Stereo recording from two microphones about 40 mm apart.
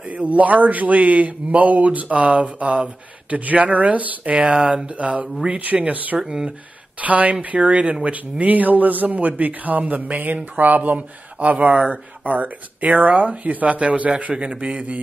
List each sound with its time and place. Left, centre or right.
0.0 s a man's voice: right
4.2 s a man's voice: right
6.1 s speech: centre
7.0 s a man's voice: right